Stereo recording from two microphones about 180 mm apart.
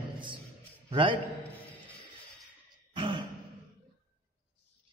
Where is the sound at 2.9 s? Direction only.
25° right (ahead or behind).